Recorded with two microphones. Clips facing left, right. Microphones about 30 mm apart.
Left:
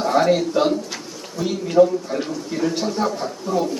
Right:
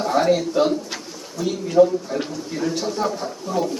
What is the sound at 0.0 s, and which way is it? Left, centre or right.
A man's voice, centre.